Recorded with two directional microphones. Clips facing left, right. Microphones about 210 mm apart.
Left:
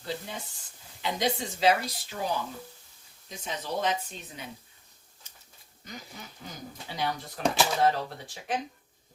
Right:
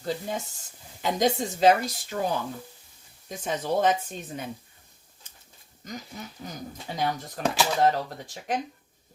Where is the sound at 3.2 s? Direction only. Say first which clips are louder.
Right 7 dB; 50° right (ahead or behind).